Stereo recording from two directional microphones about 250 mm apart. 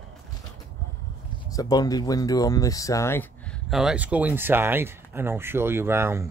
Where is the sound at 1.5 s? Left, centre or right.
Centre.